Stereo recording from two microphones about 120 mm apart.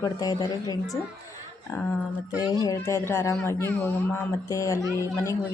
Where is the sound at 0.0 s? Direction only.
35° left (ahead or behind).